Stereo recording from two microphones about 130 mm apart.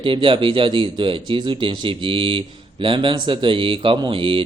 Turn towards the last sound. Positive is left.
turn(degrees=-40)  # may be behind; listen again after turning